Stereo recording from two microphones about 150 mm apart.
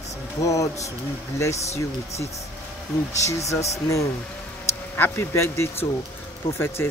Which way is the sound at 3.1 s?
20° left (ahead or behind).